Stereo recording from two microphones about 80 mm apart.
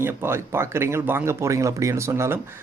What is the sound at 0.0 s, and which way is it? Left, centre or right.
Speech, right.